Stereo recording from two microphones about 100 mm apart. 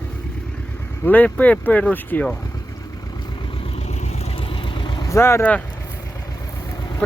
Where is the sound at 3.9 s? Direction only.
75° left (ahead or behind); by 5.1 s 55° left (ahead or behind).